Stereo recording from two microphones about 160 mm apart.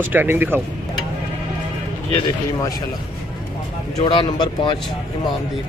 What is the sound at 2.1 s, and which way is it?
Speech, 25° left (ahead or behind).